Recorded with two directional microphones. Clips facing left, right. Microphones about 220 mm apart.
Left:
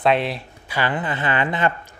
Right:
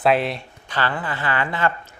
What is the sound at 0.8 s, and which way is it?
Speech, 20° left (ahead or behind).